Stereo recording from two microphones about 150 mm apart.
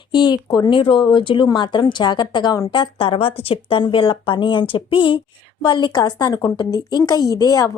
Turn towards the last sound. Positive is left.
turn(degrees=25)  # may be behind; listen again after turning